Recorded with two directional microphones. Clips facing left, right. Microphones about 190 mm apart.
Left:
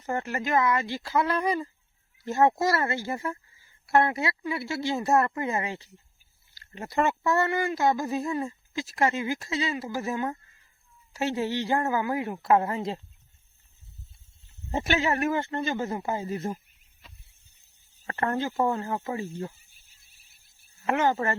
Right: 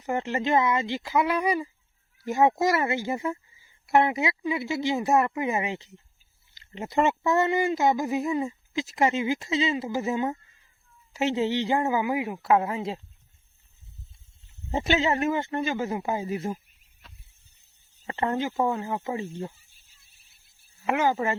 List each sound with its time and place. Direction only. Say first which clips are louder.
0.0 s speech: right 3 dB; 20° right (ahead or behind)
14.7 s speech: right 2 dB; 20° right (ahead or behind)
18.0 s speech: right 1 dB; 20° right (ahead or behind)
20.8 s speech: even; 10° right (ahead or behind)